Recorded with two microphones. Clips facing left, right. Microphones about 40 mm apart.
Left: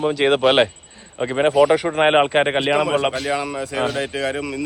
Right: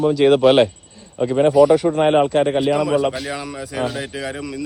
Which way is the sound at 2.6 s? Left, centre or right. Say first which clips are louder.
Right 1 dB; left.